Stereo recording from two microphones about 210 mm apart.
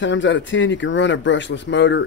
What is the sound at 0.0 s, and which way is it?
Speech, 60° left (ahead or behind).